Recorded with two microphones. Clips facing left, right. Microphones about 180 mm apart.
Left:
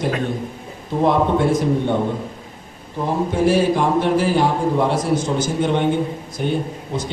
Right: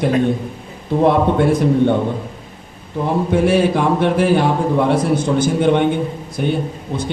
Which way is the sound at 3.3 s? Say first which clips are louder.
Right 2 dB; 60° right (ahead or behind).